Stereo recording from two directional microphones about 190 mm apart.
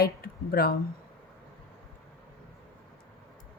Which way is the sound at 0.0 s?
50° left (ahead or behind).